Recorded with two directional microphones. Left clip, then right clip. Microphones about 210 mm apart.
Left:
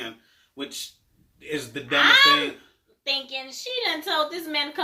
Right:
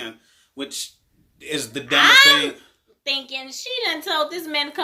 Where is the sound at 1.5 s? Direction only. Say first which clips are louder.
Right 4 dB; 50° right (ahead or behind).